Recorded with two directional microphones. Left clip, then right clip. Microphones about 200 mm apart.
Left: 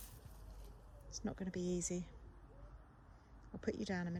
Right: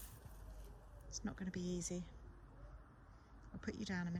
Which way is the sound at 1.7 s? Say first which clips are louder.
Left 4 dB; 20° left (ahead or behind).